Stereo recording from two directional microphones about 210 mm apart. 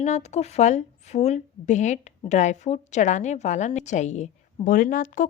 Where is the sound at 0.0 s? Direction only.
35° left (ahead or behind).